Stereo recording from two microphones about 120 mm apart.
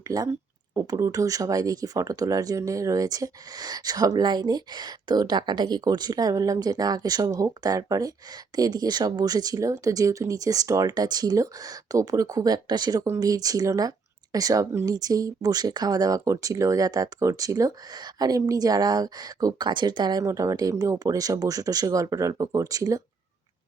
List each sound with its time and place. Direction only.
0.1 s speech: 30° right (ahead or behind)